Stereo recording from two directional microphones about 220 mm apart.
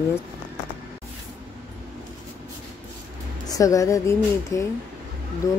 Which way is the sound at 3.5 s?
15° left (ahead or behind).